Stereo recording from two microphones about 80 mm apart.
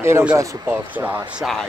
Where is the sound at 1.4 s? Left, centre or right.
Centre.